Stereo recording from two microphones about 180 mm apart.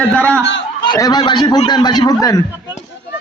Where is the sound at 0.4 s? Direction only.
85° left.